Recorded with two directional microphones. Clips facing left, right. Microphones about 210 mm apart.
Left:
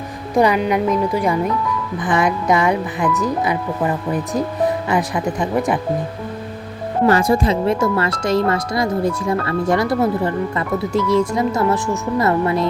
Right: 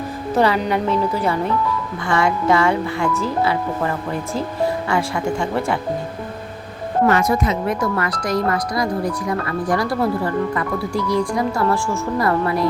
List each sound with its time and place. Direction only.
0.3 s speech: 15° left (ahead or behind)
7.1 s speech: 30° left (ahead or behind)